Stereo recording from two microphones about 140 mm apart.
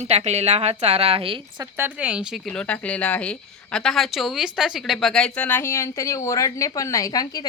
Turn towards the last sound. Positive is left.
turn(degrees=25)  # may be behind; listen again after turning